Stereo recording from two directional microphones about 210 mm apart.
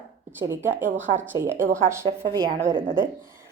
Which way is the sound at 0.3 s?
10° right (ahead or behind).